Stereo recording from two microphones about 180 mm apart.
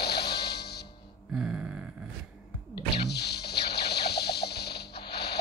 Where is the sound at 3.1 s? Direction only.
65° left (ahead or behind).